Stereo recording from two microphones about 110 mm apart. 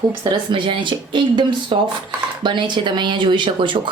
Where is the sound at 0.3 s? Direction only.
50° right (ahead or behind).